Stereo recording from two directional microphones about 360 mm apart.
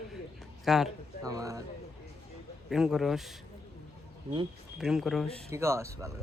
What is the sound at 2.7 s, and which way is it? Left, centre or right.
Speech, centre.